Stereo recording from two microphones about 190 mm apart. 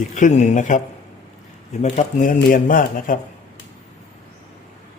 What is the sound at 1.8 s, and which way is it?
A man's voice, 40° left (ahead or behind).